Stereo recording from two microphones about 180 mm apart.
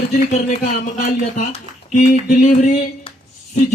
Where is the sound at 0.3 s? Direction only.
45° left (ahead or behind).